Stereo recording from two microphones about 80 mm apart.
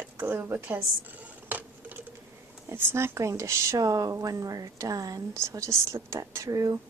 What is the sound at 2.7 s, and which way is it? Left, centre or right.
Speech, right.